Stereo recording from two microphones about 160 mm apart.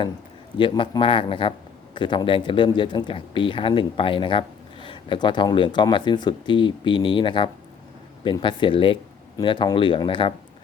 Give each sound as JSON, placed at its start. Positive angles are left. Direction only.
{"t": 0.6, "sound": "speech", "side_deg": 30}